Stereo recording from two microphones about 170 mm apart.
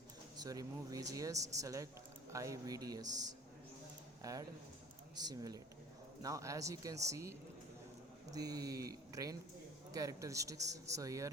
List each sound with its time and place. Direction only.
0.3 s speech: 20° right (ahead or behind)